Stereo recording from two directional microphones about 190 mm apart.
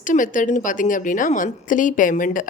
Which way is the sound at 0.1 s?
45° left (ahead or behind).